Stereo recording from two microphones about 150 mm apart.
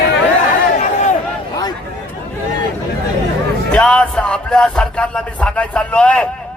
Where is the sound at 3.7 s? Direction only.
5° left (ahead or behind).